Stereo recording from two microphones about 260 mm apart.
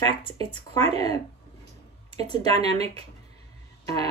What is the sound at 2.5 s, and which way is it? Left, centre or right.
Speech, right.